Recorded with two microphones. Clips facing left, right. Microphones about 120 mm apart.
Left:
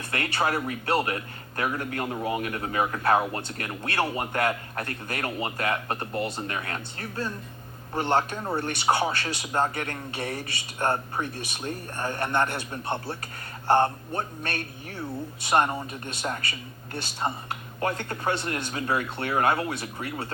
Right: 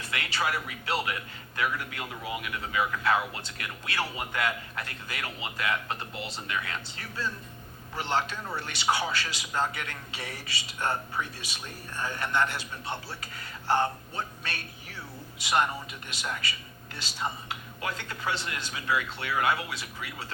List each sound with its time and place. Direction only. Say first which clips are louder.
0.2 s a man's voice: left 5 dB; 55° left (ahead or behind)
1.1 s a man's voice: left 4 dB; 35° left (ahead or behind)
16.4 s a man's voice: left 2 dB; 55° left (ahead or behind)